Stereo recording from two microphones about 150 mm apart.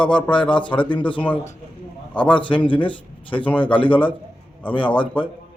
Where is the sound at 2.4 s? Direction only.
35° left (ahead or behind).